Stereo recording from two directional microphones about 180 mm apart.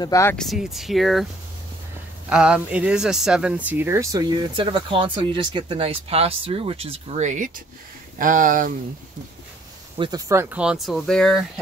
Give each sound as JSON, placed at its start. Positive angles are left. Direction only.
{"t": 0.0, "sound": "speech", "side_deg": 15}
{"t": 0.4, "sound": "speech", "side_deg": 0}
{"t": 2.2, "sound": "speech", "side_deg": -5}
{"t": 9.9, "sound": "speech", "side_deg": -25}